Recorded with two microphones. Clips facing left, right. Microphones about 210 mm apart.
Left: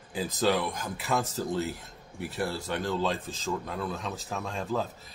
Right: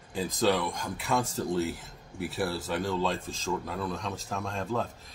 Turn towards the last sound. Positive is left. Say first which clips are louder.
# left 1 dB
turn(degrees=0)  # may be behind; listen again after turning